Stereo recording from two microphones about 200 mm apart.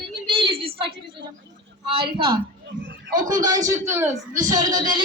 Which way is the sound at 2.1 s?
25° right (ahead or behind).